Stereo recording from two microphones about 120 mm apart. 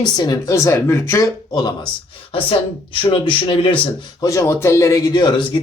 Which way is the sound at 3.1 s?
45° left (ahead or behind).